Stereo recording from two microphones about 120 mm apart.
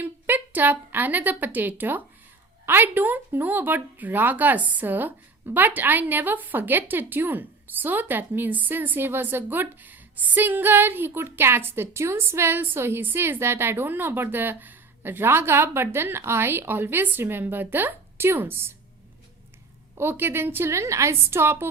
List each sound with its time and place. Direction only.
0.0 s a woman's voice: 15° right (ahead or behind)
20.0 s a woman's voice: 20° right (ahead or behind)